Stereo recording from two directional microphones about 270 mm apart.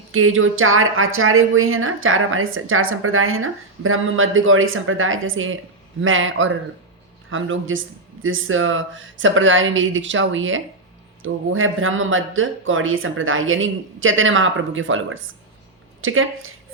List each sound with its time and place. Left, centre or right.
0.1 s speech: right